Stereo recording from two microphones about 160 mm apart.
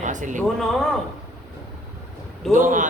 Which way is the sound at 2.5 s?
55° right (ahead or behind).